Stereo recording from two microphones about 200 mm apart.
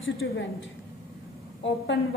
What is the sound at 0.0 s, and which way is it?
Speech, 75° left (ahead or behind).